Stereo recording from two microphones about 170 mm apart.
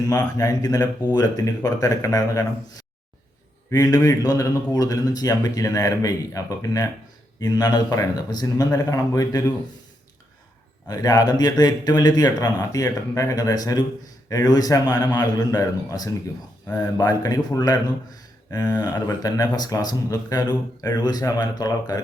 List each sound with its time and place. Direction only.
0.2 s a man's voice: 20° left (ahead or behind)
3.7 s a man's voice: 20° left (ahead or behind)
10.8 s a man's voice: 20° left (ahead or behind)